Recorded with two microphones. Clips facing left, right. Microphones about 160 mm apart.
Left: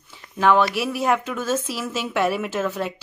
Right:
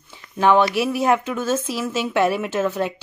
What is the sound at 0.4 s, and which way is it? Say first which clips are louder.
A woman's voice: right 2 dB; centre (ahead or behind).